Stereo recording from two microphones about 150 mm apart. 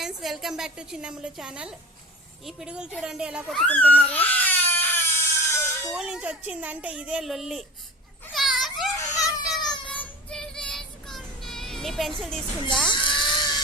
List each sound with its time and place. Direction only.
0.0 s a woman's voice: centre (ahead or behind)
3.6 s speech: 10° left (ahead or behind)
3.9 s baby cry: 10° left (ahead or behind)
5.9 s speech: 5° right (ahead or behind)
8.3 s dog: centre (ahead or behind)
9.0 s children playing: 20° left (ahead or behind)
9.5 s child singing: centre (ahead or behind)
12.9 s a sound: 35° left (ahead or behind)